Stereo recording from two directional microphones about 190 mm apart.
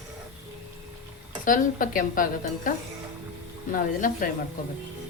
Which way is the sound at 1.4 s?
45° left (ahead or behind).